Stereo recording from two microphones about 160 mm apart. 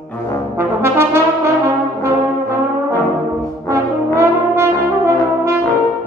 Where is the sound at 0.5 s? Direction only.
15° right (ahead or behind).